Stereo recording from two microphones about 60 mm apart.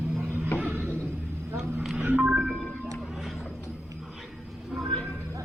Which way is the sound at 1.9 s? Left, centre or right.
Right.